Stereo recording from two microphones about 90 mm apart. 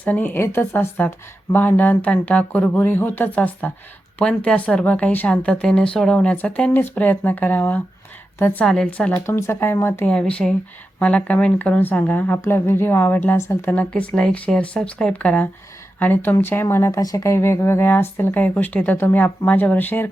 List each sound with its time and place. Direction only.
0.0 s a woman's voice: 15° left (ahead or behind)
8.6 s a woman's voice: 5° left (ahead or behind)
9.2 s speech: 25° left (ahead or behind)
10.1 s a woman's voice: 10° left (ahead or behind); by 13.7 s 30° left (ahead or behind)
13.7 s a woman's voice: 15° left (ahead or behind)
17.0 s speech: 40° left (ahead or behind); by 20.1 s 20° left (ahead or behind)